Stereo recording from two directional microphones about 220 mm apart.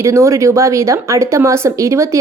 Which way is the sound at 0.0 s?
15° right (ahead or behind).